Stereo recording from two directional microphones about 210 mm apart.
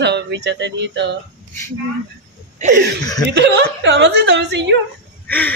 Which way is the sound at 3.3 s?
55° right (ahead or behind).